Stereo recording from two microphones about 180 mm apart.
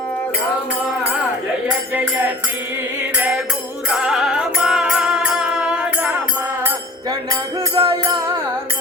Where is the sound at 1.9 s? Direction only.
10° right (ahead or behind).